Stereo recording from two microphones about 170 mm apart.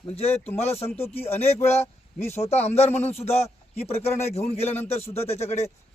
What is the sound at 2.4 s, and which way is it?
A man's voice, 40° left (ahead or behind).